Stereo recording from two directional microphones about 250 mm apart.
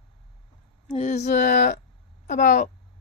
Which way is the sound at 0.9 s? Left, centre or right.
Left.